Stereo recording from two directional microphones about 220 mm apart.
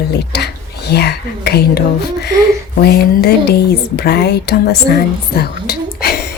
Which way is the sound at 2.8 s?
45° left (ahead or behind).